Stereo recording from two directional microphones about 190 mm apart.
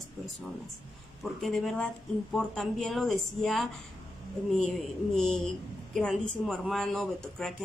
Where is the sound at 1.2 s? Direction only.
Centre (ahead or behind).